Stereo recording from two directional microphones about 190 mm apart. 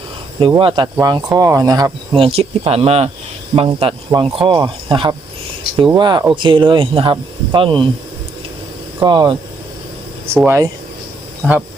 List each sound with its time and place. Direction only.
0.3 s speech: 25° right (ahead or behind)
9.0 s speech: 25° right (ahead or behind)